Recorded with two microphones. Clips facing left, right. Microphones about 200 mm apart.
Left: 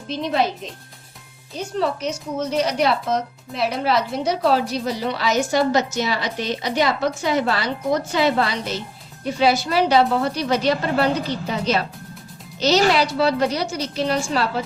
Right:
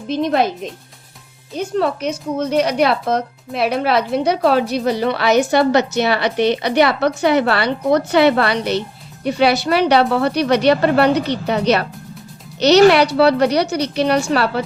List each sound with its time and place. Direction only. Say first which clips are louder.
0.1 s a woman's voice: right 5 dB; 55° right (ahead or behind)
1.5 s a woman's voice: right 4 dB; 55° right (ahead or behind)